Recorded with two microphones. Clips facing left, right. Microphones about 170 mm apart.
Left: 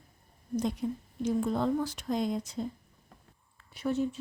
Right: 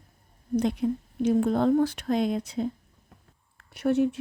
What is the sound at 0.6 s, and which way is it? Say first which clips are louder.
Speech: right 6 dB; 70° right (ahead or behind).